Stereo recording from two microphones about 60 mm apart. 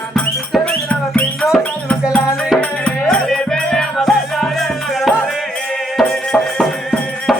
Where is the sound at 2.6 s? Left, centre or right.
Centre.